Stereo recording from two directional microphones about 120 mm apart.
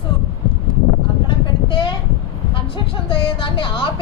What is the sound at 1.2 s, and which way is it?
Vehicle, 45° left (ahead or behind).